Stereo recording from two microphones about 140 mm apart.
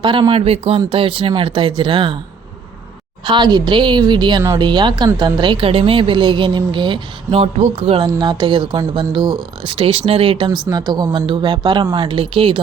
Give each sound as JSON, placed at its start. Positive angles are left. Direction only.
{"t": 0.0, "sound": "a woman's voice", "side_deg": -35}
{"t": 3.2, "sound": "a woman's voice", "side_deg": -30}
{"t": 7.3, "sound": "speech", "side_deg": -50}
{"t": 8.0, "sound": "a woman's voice", "side_deg": -30}